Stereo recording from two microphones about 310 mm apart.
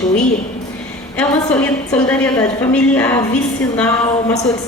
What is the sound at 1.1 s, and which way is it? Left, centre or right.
A woman's voice, centre.